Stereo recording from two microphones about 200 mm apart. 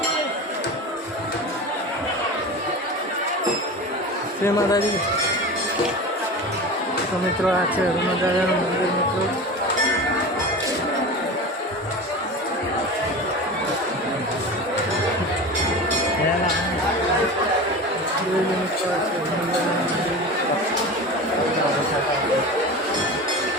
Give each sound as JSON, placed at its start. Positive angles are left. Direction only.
{"t": 4.4, "sound": "speech", "side_deg": 15}